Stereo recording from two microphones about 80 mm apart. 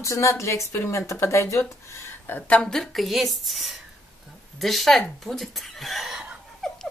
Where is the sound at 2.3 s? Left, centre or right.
Centre.